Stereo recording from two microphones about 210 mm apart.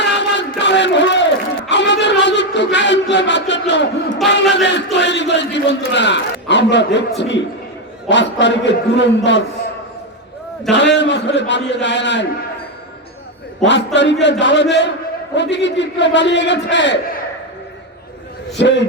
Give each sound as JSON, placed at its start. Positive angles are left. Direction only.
{"t": 0.0, "sound": "a sound", "side_deg": 55}
{"t": 8.0, "sound": "a man's voice", "side_deg": 55}
{"t": 10.7, "sound": "a man's voice", "side_deg": 55}
{"t": 13.6, "sound": "a man's voice", "side_deg": 55}
{"t": 18.5, "sound": "a man's voice", "side_deg": 55}